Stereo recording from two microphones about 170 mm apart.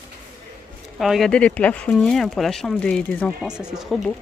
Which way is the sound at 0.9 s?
Centre (ahead or behind).